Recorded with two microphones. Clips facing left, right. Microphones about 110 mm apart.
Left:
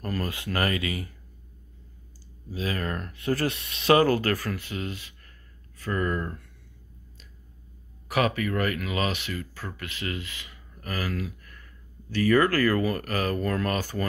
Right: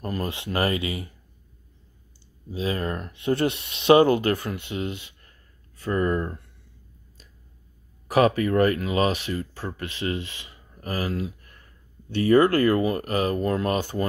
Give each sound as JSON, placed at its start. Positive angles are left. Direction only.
{"t": 0.0, "sound": "speech", "side_deg": -25}
{"t": 2.5, "sound": "speech", "side_deg": -25}
{"t": 8.1, "sound": "speech", "side_deg": -30}